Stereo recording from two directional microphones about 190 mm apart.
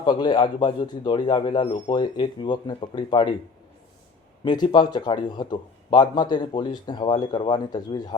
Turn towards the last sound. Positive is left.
turn(degrees=25)  # may be behind; listen again after turning